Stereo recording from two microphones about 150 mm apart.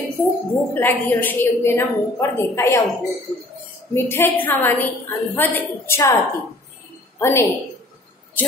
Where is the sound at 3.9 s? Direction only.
15° left (ahead or behind).